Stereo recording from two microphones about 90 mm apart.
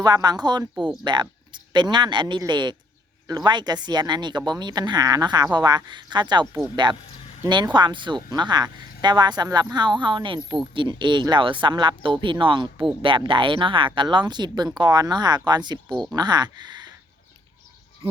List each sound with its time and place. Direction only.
0.0 s speech: 50° right (ahead or behind)
13.0 s speech: 70° right (ahead or behind); by 16.9 s 55° right (ahead or behind)